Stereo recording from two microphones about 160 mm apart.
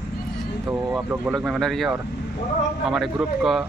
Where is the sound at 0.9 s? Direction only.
5° right (ahead or behind).